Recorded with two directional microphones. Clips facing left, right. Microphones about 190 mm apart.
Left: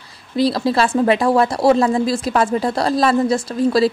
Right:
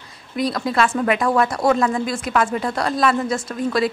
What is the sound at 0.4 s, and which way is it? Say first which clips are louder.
A woman's voice: left 4 dB; 30° left (ahead or behind).